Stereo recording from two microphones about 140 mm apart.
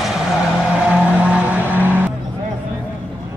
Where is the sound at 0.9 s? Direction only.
10° right (ahead or behind).